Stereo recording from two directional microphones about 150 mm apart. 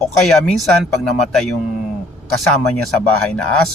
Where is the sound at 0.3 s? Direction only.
Centre (ahead or behind).